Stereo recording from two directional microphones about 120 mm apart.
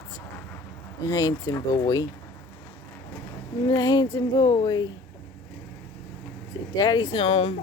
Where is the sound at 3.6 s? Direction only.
35° left (ahead or behind).